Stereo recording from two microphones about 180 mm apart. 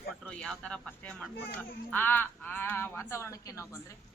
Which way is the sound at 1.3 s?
70° left (ahead or behind).